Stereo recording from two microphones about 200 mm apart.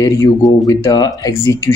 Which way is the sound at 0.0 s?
15° left (ahead or behind).